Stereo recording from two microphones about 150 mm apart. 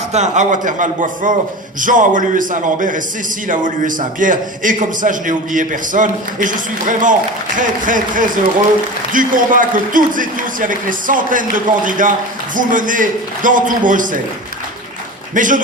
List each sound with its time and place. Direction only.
0.1 s a man's voice: 50° right (ahead or behind)
15.4 s a man's voice: 60° right (ahead or behind)